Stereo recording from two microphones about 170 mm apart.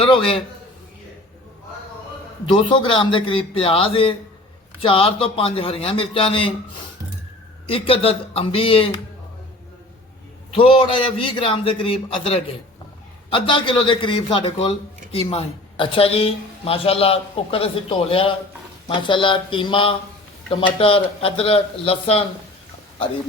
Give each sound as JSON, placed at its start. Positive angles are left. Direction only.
{"t": 0.0, "sound": "a man's voice", "side_deg": 30}
{"t": 2.5, "sound": "a man's voice", "side_deg": 30}
{"t": 7.7, "sound": "a man's voice", "side_deg": 35}
{"t": 10.5, "sound": "a man's voice", "side_deg": 30}